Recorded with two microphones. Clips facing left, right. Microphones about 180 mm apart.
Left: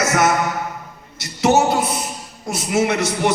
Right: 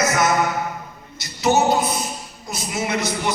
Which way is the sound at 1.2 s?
75° left (ahead or behind).